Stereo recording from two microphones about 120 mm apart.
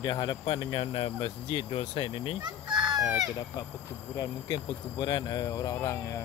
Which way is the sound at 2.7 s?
5° right (ahead or behind).